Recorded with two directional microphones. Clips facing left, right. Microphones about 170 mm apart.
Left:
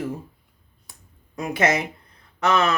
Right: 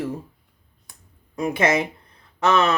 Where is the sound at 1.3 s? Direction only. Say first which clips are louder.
Right 2 dB; 30° right (ahead or behind).